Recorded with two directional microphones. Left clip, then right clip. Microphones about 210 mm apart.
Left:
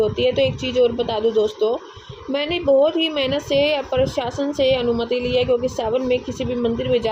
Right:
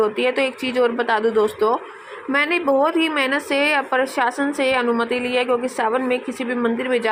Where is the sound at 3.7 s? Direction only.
35° right (ahead or behind).